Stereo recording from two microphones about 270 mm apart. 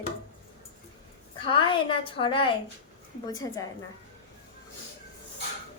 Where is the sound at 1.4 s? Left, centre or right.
Centre.